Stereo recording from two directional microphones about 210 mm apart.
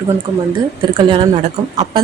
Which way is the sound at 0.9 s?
25° right (ahead or behind).